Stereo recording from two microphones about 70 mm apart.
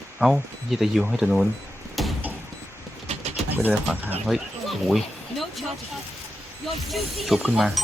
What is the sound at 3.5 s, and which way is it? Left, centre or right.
Speech, right.